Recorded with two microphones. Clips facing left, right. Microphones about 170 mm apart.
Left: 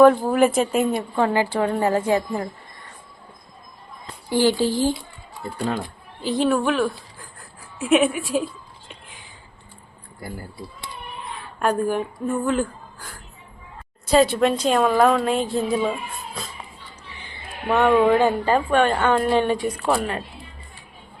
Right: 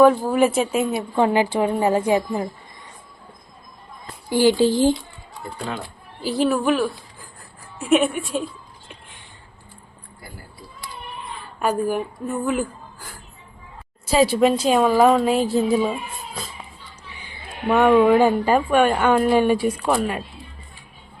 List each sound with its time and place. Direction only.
0.3 s a woman's voice: centre (ahead or behind)
1.1 s a woman's voice: 20° right (ahead or behind)
4.3 s a woman's voice: 15° right (ahead or behind)
6.2 s a woman's voice: 5° right (ahead or behind)
8.9 s a sound: centre (ahead or behind)
10.2 s speech: 50° left (ahead or behind)
11.2 s a woman's voice: centre (ahead or behind)
17.7 s a woman's voice: 5° right (ahead or behind)
18.2 s a woman's voice: 10° right (ahead or behind)